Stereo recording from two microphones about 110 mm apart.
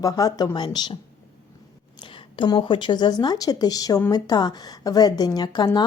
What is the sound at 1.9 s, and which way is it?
A woman's voice, 50° left (ahead or behind).